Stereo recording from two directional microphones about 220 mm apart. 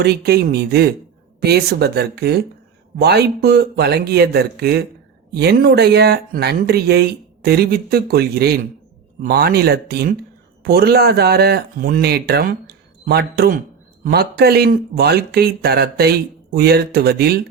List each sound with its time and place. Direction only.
0.0 s speech: 45° right (ahead or behind)